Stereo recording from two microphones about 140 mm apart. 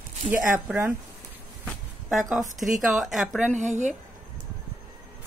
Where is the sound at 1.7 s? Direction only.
Centre (ahead or behind).